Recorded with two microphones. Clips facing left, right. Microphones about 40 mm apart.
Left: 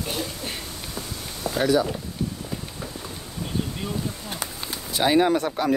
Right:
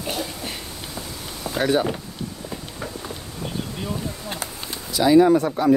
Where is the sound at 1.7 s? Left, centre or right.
Right.